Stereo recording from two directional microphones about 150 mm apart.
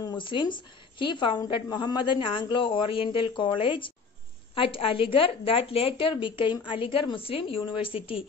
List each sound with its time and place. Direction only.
0.2 s a woman's voice: 35° left (ahead or behind)